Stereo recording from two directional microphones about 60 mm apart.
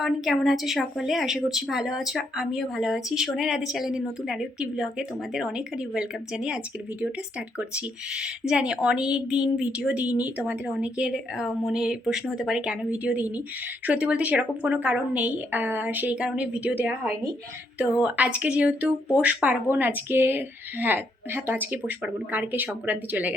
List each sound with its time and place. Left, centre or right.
0.0 s a woman's voice: centre
12.9 s speech: right
19.7 s a woman's voice: right